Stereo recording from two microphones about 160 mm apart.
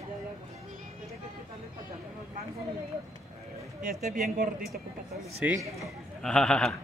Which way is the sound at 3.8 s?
65° right (ahead or behind).